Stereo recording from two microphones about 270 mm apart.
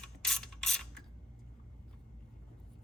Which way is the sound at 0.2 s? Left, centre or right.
Centre.